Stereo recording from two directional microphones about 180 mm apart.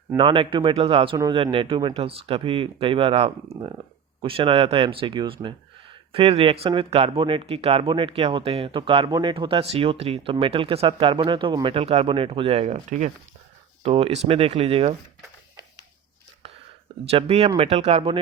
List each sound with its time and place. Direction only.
0.2 s speech: 30° right (ahead or behind)
17.1 s speech: 35° right (ahead or behind)